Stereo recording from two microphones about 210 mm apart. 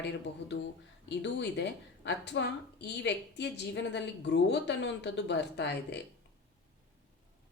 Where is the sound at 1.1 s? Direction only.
55° left (ahead or behind).